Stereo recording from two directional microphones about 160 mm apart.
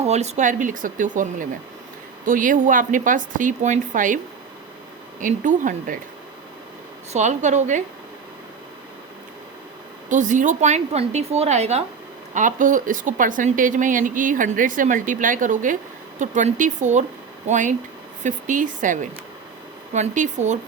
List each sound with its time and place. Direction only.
0.0 s a woman's voice: 45° right (ahead or behind)
5.2 s a woman's voice: 55° right (ahead or behind)
7.1 s a woman's voice: 45° right (ahead or behind)
10.1 s a woman's voice: 50° right (ahead or behind)
12.3 s a woman's voice: 55° right (ahead or behind)